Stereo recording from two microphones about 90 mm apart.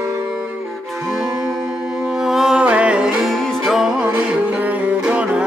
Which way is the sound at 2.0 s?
5° right (ahead or behind).